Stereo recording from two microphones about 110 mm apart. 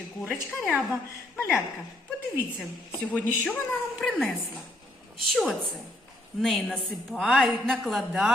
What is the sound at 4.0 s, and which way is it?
A man's voice, centre (ahead or behind).